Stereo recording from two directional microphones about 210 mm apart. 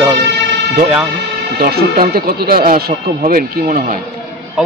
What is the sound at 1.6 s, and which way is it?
Speech, 45° right (ahead or behind).